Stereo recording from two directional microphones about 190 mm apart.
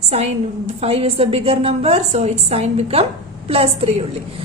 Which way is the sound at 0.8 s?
30° right (ahead or behind).